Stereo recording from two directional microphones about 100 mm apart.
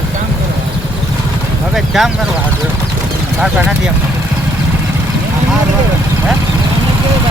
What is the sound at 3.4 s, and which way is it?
Speech, 10° right (ahead or behind).